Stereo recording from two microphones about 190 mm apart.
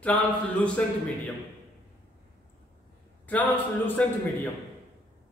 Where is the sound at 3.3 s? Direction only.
10° left (ahead or behind).